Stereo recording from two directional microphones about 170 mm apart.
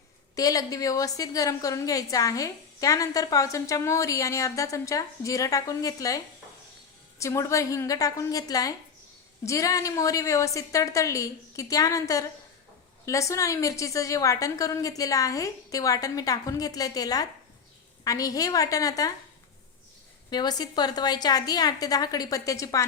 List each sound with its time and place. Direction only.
0.3 s a woman's voice: 20° left (ahead or behind)
20.3 s a woman's voice: 25° left (ahead or behind)